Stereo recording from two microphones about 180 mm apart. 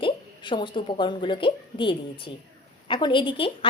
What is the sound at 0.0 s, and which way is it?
A woman's voice, 25° left (ahead or behind).